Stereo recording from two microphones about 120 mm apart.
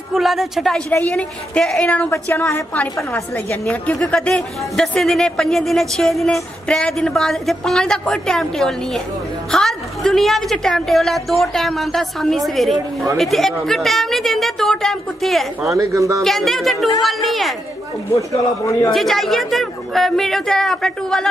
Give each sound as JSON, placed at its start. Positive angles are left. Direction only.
{"t": 0.1, "sound": "a woman's voice", "side_deg": 0}
{"t": 15.7, "sound": "a man's voice", "side_deg": -30}
{"t": 16.2, "sound": "a woman's voice", "side_deg": 0}
{"t": 18.1, "sound": "speech", "side_deg": 25}
{"t": 18.9, "sound": "a woman's voice", "side_deg": 0}